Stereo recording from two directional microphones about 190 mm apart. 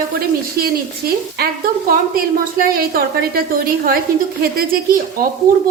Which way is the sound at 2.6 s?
50° right (ahead or behind).